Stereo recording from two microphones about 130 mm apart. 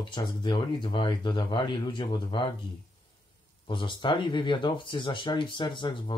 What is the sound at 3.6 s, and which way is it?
Speech, 40° left (ahead or behind).